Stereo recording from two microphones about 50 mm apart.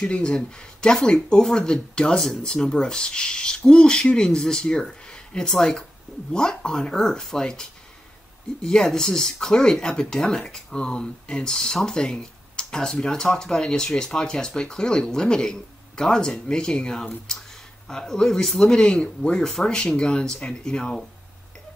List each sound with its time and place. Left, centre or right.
0.0 s speech: centre
8.6 s speech: centre